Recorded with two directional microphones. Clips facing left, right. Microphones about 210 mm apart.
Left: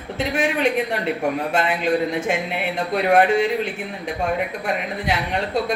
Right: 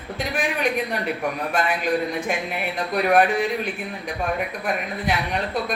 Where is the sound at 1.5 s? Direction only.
25° left (ahead or behind).